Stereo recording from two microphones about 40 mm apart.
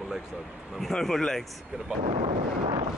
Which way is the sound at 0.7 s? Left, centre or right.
Centre.